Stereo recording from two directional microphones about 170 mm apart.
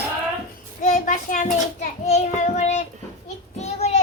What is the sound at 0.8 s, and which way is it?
A child's voice, 50° left (ahead or behind).